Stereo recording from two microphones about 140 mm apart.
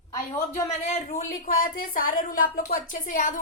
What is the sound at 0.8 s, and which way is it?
A woman's voice, 55° left (ahead or behind).